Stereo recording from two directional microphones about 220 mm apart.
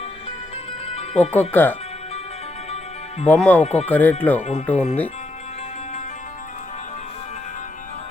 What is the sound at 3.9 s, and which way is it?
Speech, 10° left (ahead or behind).